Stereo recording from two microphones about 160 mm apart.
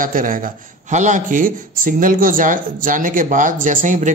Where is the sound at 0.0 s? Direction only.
60° right (ahead or behind).